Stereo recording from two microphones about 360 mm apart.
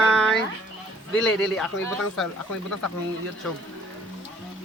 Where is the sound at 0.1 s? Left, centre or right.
Centre.